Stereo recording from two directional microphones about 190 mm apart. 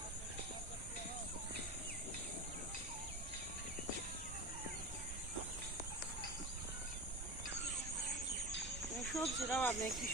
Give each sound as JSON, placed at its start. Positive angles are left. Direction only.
{"t": 9.0, "sound": "speech", "side_deg": 0}